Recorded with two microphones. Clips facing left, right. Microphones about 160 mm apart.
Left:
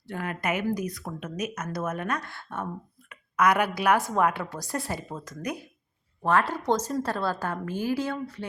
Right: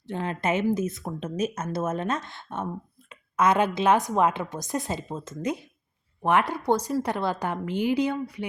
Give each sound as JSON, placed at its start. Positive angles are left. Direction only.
{"t": 0.1, "sound": "a woman's voice", "side_deg": -25}